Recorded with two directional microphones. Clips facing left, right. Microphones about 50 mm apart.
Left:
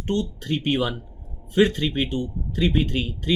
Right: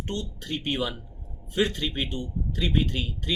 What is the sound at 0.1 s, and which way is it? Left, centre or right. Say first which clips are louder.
A man's voice: left 10 dB; left.